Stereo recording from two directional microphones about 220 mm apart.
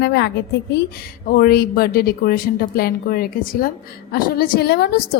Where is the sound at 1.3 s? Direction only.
45° left (ahead or behind).